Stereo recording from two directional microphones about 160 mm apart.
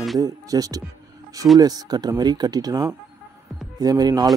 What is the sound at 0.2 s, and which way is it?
Speech, 20° right (ahead or behind).